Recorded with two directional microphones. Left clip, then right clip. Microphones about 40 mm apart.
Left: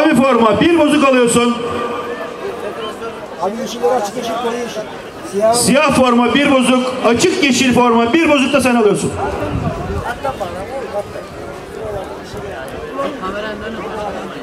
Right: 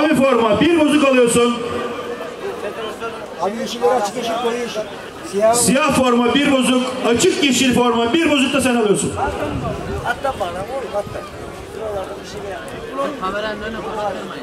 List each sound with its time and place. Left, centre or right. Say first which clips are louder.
0.0 s a man's voice: left 3 dB; left
3.8 s speech: left 1 dB; centre
5.6 s a man's voice: left 4 dB; left
13.0 s speech: even; right